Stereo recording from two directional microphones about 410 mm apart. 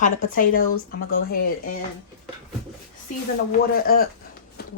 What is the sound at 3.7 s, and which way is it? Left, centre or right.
Speech, left.